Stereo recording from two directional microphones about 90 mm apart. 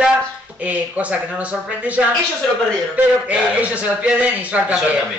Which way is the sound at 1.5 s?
15° right (ahead or behind).